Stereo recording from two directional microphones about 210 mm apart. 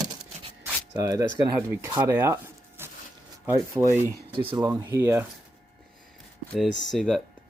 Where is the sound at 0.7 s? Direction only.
15° right (ahead or behind).